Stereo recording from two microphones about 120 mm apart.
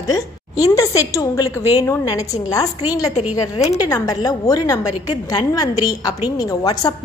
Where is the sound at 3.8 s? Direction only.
30° left (ahead or behind).